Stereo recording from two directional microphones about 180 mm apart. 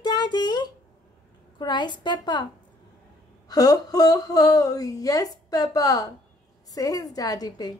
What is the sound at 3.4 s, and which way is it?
A woman's voice, 20° left (ahead or behind).